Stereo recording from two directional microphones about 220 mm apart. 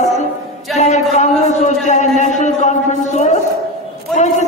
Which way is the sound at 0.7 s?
30° left (ahead or behind).